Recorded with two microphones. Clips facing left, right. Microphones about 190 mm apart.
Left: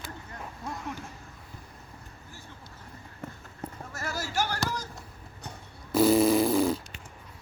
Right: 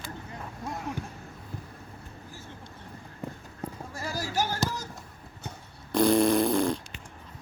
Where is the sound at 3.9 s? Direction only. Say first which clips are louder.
Right 1 dB; 15° right (ahead or behind).